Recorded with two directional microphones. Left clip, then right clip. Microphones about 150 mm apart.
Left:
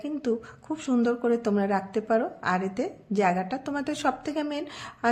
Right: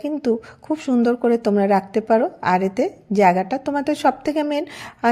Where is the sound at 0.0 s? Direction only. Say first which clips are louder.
Right 7 dB; 40° right (ahead or behind).